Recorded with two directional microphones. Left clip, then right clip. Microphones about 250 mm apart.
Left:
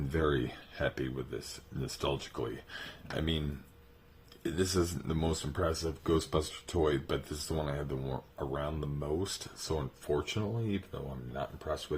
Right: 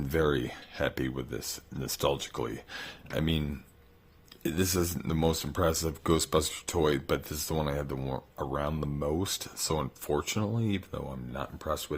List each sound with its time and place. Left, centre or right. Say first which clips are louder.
0.1 s speech: right 4 dB; right
4.4 s speech: right 2 dB; right